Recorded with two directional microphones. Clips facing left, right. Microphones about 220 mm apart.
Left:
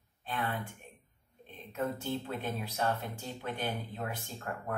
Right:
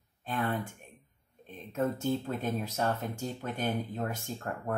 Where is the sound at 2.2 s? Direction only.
45° right (ahead or behind).